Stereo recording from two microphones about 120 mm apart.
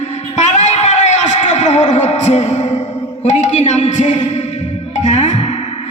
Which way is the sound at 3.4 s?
75° left (ahead or behind).